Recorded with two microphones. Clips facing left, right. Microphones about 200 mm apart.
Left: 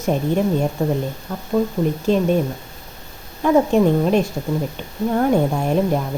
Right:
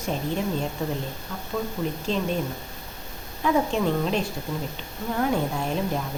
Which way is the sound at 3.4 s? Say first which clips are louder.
Left 8 dB; 50° left (ahead or behind).